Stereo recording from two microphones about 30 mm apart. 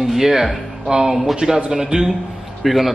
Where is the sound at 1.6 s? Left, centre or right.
Right.